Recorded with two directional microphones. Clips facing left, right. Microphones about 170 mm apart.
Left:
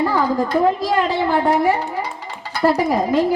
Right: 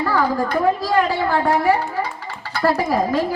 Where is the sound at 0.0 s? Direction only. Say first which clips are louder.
Left 1 dB; 20° left (ahead or behind).